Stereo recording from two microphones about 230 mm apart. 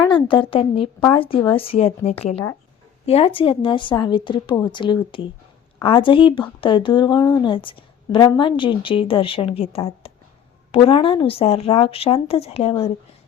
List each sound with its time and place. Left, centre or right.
0.0 s speech: left